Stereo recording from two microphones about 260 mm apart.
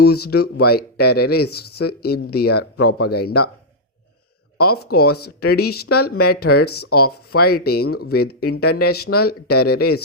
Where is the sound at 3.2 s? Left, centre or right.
Left.